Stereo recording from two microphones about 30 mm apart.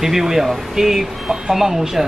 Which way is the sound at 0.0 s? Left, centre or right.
Centre.